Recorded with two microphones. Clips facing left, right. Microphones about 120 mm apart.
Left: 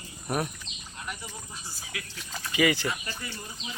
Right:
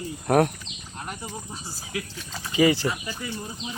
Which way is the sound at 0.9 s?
45° right (ahead or behind).